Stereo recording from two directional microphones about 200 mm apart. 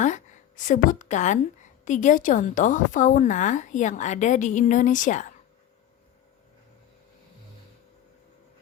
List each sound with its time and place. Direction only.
0.0 s a woman's voice: 40° left (ahead or behind)